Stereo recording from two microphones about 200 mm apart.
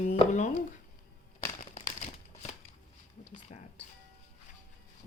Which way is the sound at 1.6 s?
35° left (ahead or behind).